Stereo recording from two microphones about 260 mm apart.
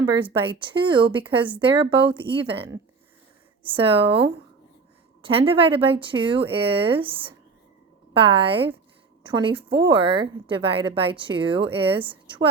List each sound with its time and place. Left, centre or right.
0.2 s speech: centre